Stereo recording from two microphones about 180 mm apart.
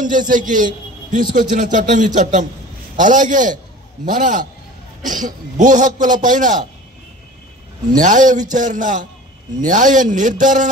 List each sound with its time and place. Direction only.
0.3 s a man's voice: 45° right (ahead or behind)
8.0 s a man's voice: 45° right (ahead or behind)